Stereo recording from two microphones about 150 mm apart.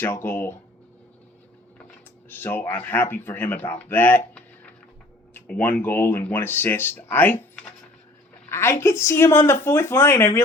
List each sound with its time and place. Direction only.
0.0 s speech: 15° left (ahead or behind)
2.3 s speech: 15° left (ahead or behind)
5.3 s speech: 10° left (ahead or behind)
8.4 s a woman's voice: 15° left (ahead or behind)